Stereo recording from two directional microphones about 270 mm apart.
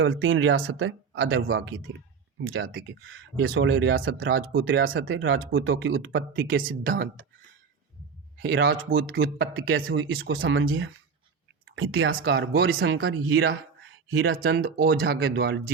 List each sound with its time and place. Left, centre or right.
0.0 s speech: right
8.4 s speech: right